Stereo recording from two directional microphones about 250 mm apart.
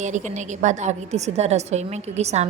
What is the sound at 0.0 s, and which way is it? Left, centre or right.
A woman's voice, right.